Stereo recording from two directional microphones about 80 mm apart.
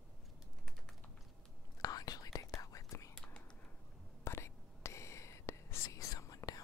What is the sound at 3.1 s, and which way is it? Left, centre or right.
Whispering, centre.